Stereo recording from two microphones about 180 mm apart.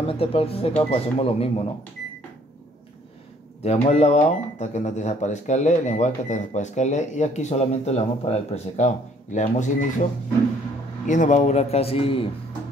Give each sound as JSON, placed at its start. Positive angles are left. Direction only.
{"t": 0.0, "sound": "speech", "side_deg": 30}
{"t": 3.6, "sound": "speech", "side_deg": 35}
{"t": 11.1, "sound": "speech", "side_deg": 45}